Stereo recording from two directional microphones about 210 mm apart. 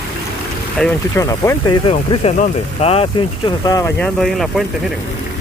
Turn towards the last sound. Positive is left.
turn(degrees=0)  # may be behind; listen again after turning